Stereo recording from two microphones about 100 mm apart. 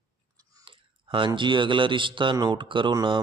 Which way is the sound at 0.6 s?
60° right (ahead or behind).